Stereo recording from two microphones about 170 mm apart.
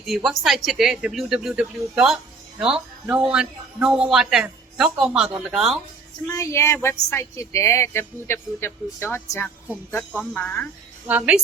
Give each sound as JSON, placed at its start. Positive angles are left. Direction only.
{"t": 0.0, "sound": "a man's voice", "side_deg": 0}
{"t": 6.2, "sound": "a woman's voice", "side_deg": 15}
{"t": 11.0, "sound": "a woman's voice", "side_deg": -10}